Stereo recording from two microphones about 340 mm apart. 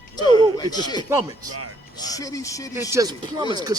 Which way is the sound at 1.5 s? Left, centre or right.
Right.